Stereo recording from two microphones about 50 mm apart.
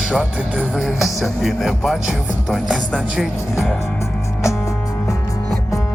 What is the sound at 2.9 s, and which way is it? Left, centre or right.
Speech, centre.